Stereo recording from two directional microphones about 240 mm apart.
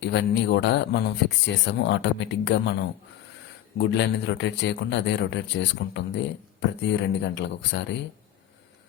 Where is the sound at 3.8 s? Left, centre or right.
Left.